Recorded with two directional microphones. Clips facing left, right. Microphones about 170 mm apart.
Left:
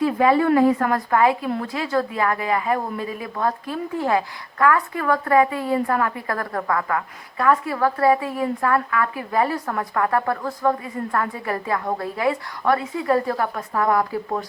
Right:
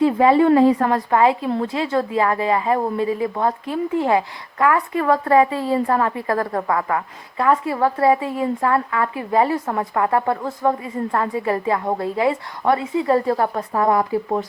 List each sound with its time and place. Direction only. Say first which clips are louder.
0.0 s a woman's voice: right 3 dB; 25° right (ahead or behind)